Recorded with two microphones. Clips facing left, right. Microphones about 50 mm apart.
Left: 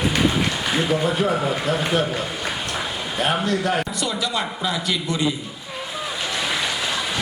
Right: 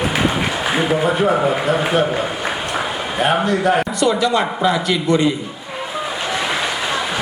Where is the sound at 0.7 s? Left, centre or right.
Centre.